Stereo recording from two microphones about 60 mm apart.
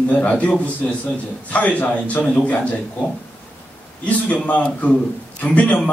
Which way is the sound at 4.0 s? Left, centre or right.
Left.